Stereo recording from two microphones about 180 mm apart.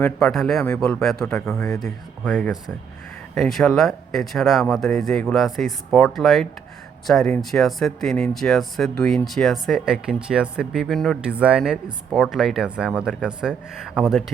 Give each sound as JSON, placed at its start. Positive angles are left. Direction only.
{"t": 0.0, "sound": "speech", "side_deg": 5}
{"t": 1.5, "sound": "speech", "side_deg": 15}